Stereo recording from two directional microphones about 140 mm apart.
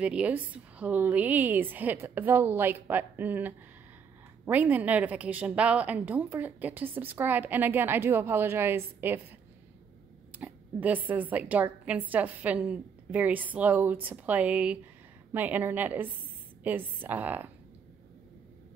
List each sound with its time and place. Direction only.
0.0 s a woman's voice: 10° right (ahead or behind)
10.4 s a woman's voice: 10° right (ahead or behind)